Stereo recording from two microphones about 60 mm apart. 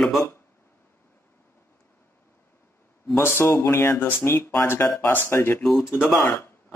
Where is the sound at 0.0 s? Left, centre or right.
Centre.